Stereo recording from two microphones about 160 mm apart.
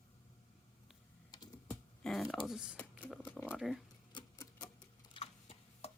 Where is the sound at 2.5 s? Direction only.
5° right (ahead or behind).